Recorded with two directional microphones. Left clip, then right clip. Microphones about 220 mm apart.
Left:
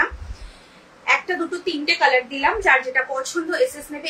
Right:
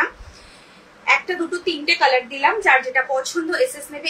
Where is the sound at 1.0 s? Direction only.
15° left (ahead or behind).